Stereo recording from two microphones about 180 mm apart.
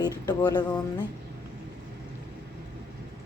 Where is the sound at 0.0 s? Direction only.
20° left (ahead or behind).